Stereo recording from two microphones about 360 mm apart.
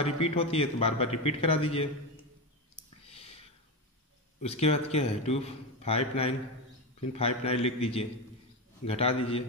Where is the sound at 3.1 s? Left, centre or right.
Centre.